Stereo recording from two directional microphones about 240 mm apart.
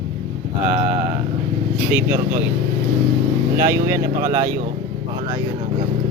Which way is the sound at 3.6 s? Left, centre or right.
Centre.